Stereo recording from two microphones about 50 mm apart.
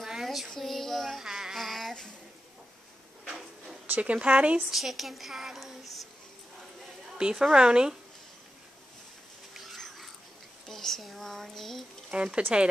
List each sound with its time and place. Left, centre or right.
0.0 s female singing: centre
0.5 s speech: centre
1.2 s a sound: centre
1.6 s child singing: centre
4.0 s speech: right
4.6 s speech: centre
7.2 s a woman's voice: centre
9.5 s dog: centre
9.8 s cat: centre
10.7 s speech: centre
12.1 s speech: centre